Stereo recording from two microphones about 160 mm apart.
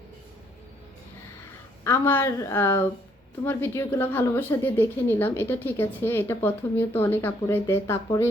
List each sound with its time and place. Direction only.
1.8 s speech: 15° left (ahead or behind)